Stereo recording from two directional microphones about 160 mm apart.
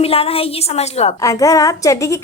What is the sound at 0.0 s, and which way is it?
A woman's voice, 35° left (ahead or behind).